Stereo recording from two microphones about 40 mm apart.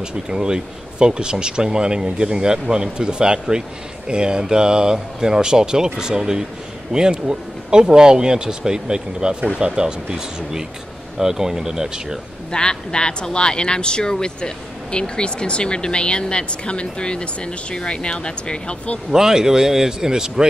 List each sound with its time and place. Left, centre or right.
0.0 s speech: centre
12.4 s speech: left
19.1 s speech: centre